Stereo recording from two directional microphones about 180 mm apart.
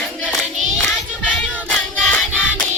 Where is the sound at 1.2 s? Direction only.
10° left (ahead or behind).